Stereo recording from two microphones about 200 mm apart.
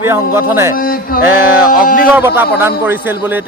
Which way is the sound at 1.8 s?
45° left (ahead or behind).